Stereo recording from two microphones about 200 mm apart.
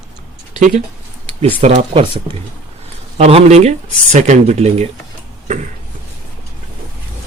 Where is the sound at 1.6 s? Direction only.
30° right (ahead or behind).